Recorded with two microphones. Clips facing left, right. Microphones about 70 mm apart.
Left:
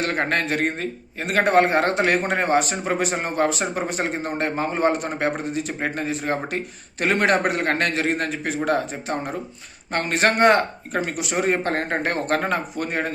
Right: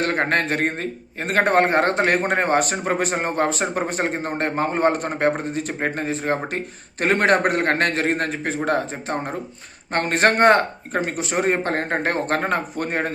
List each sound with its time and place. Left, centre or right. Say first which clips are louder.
0.0 s speech: right 2 dB; right